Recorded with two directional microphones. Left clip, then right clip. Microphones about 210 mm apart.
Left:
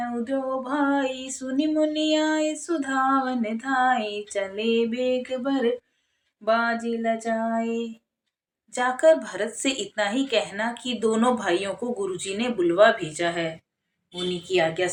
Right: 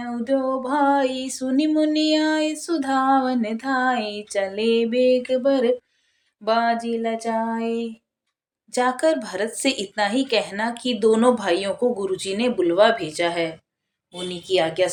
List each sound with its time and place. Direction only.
0.3 s female singing: 40° right (ahead or behind)